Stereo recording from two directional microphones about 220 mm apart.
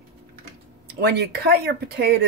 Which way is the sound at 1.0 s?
50° right (ahead or behind).